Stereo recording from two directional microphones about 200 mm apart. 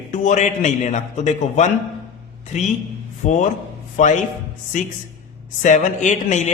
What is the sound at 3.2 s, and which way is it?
A man's voice, 35° left (ahead or behind).